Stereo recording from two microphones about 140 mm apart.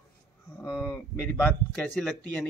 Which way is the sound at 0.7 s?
10° left (ahead or behind).